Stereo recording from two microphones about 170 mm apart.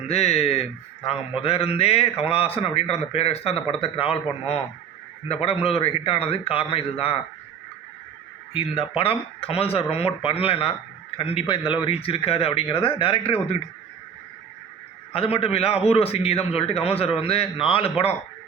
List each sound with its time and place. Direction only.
0.1 s a man's voice: 40° left (ahead or behind)
8.5 s a man's voice: 35° left (ahead or behind)
15.1 s a man's voice: 35° left (ahead or behind)